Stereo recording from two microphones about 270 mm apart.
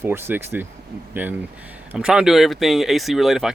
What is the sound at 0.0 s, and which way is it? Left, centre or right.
Speech, centre.